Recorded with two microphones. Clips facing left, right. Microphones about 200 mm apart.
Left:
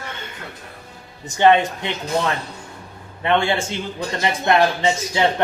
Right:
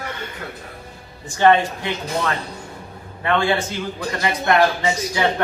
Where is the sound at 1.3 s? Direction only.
20° left (ahead or behind).